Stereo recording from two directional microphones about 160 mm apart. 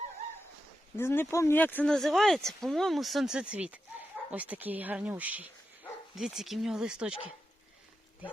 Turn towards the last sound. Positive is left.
turn(degrees=-5)  # may be behind; listen again after turning